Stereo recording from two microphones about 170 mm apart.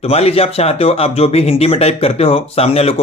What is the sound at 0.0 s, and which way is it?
Speech, 35° left (ahead or behind).